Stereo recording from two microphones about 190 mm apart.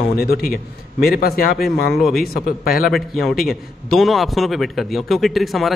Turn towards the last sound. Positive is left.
turn(degrees=0)  # may be behind; listen again after turning